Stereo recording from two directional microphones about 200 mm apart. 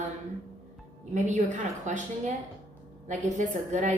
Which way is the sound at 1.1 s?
35° right (ahead or behind).